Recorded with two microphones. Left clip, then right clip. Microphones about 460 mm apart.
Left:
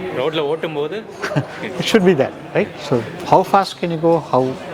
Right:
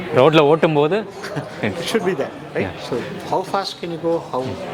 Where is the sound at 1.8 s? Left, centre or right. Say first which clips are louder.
Left 8 dB; left.